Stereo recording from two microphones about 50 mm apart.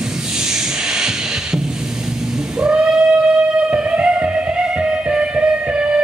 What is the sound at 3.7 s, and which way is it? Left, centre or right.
Music, right.